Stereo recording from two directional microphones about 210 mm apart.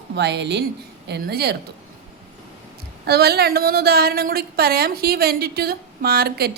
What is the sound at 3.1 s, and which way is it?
A woman's voice, 50° right (ahead or behind).